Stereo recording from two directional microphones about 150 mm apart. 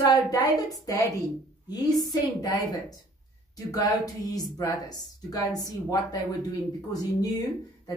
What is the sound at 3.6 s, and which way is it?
A woman's voice, 25° left (ahead or behind).